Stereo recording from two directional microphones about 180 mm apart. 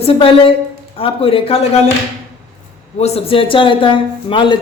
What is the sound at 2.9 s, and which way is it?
A man's voice, 35° left (ahead or behind).